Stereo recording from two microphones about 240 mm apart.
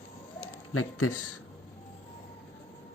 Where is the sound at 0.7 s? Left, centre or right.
Left.